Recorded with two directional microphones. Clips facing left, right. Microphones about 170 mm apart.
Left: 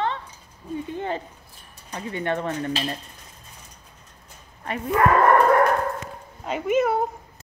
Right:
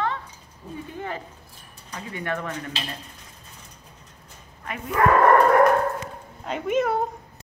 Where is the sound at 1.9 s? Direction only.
25° left (ahead or behind).